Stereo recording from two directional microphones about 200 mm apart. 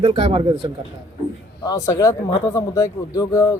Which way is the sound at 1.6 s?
20° left (ahead or behind).